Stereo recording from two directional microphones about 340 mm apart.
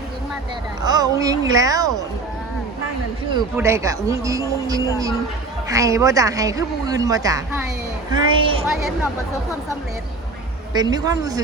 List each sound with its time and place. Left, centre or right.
0.8 s speech: centre
3.3 s speech: centre
10.8 s speech: centre